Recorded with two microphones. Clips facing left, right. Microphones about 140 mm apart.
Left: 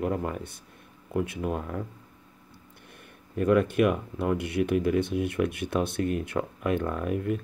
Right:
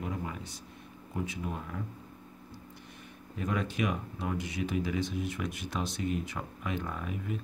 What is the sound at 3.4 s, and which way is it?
Speech, 55° left (ahead or behind).